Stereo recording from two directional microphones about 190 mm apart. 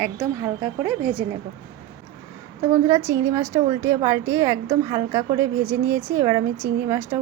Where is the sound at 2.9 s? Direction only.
15° right (ahead or behind).